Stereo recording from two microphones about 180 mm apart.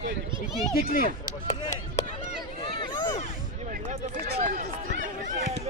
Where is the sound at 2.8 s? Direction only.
25° left (ahead or behind).